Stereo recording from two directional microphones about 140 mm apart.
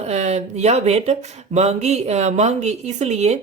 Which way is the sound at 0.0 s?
50° right (ahead or behind).